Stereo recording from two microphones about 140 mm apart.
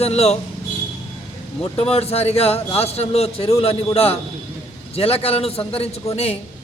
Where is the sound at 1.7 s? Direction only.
45° left (ahead or behind).